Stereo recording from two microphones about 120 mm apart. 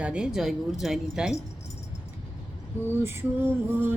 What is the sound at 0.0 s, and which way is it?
Speech, 10° right (ahead or behind).